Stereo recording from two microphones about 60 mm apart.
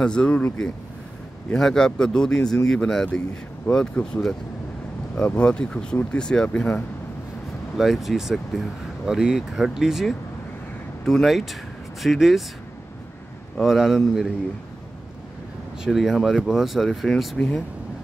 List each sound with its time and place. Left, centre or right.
0.0 s speech: centre
7.7 s speech: centre
13.6 s speech: centre
15.8 s speech: centre